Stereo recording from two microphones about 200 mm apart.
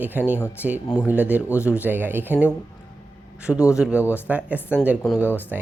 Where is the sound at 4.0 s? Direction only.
10° left (ahead or behind).